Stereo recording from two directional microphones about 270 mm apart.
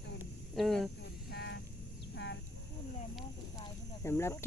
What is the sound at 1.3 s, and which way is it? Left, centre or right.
Vehicle, left.